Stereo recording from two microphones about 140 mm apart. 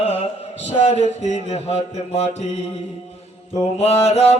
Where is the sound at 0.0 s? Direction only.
45° left (ahead or behind).